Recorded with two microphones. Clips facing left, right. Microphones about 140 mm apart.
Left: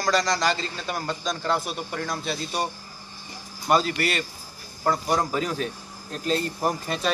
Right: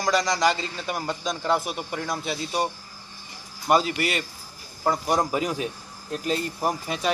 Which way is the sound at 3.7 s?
15° right (ahead or behind).